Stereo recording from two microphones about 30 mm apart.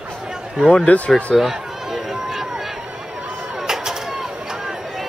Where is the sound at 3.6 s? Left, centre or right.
Centre.